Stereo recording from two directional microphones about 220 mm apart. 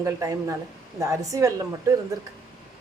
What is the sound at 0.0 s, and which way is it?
A woman's voice, 15° right (ahead or behind).